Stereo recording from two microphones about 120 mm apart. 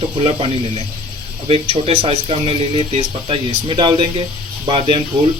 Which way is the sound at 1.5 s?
55° right (ahead or behind).